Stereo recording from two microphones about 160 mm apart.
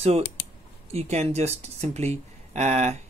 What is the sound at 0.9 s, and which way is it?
Speech, 45° right (ahead or behind).